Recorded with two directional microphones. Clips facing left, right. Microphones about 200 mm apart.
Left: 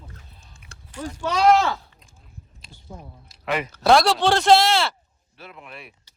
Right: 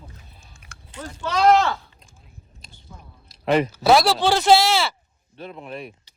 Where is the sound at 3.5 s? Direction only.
35° right (ahead or behind).